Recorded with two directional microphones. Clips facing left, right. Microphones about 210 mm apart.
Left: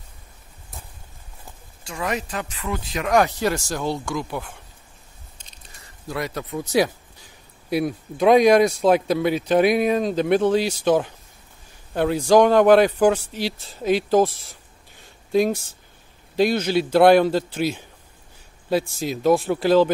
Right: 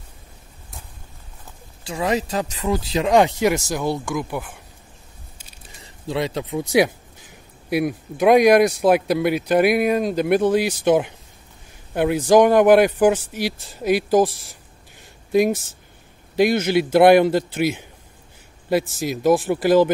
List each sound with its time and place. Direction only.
1.9 s speech: 30° right (ahead or behind)
5.8 s speech: 25° right (ahead or behind)
8.2 s speech: 10° right (ahead or behind)